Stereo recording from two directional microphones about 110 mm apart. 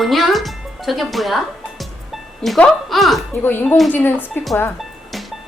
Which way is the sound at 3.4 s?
20° left (ahead or behind).